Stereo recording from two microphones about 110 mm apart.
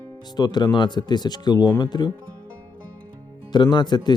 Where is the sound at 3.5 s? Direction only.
40° left (ahead or behind).